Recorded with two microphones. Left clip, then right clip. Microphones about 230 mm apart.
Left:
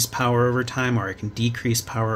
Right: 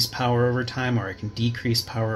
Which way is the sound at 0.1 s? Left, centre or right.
Left.